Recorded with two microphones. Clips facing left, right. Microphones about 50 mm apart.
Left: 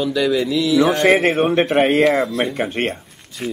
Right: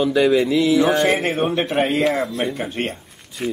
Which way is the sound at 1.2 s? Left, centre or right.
Left.